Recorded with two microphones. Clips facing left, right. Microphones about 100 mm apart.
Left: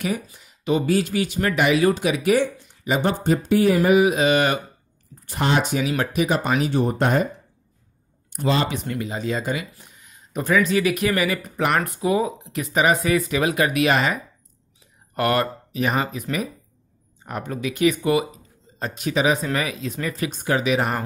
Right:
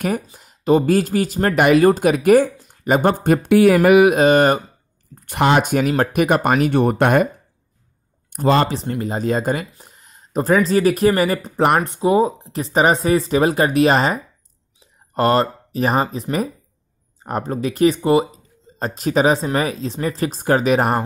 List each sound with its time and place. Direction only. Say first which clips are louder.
0.0 s speech: right 4 dB; 45° right (ahead or behind)
3.4 s speech: right 6 dB; 80° right
4.2 s speech: right 6 dB; 40° right (ahead or behind)
5.1 s speech: right 6 dB; 60° right (ahead or behind)
8.3 s speech: right 6 dB; 50° right (ahead or behind)
8.6 s speech: right 3 dB; 30° right (ahead or behind)
9.1 s speech: right 6 dB; 45° right (ahead or behind)